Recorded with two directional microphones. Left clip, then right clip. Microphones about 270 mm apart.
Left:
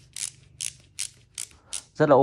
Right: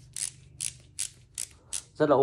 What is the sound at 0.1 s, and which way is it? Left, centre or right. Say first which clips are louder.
Mechanisms: left 2 dB; centre.